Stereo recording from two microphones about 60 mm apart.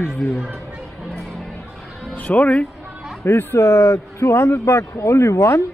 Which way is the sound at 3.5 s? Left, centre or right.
Left.